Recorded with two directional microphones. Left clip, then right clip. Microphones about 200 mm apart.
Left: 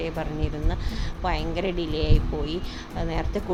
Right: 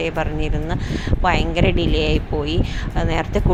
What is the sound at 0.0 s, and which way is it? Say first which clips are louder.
Speech: right 7 dB; 15° right (ahead or behind).